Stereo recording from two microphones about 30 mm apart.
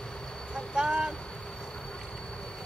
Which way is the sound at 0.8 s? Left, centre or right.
Right.